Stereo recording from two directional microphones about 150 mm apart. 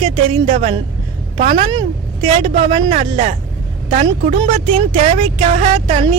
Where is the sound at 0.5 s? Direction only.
55° right (ahead or behind).